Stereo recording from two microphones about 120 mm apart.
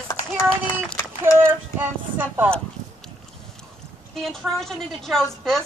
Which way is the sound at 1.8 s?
15° right (ahead or behind).